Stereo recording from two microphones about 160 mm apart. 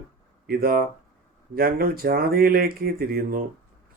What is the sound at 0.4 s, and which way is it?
Speech, 70° right (ahead or behind).